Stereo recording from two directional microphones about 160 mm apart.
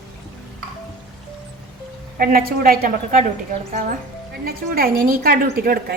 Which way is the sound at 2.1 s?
65° right (ahead or behind).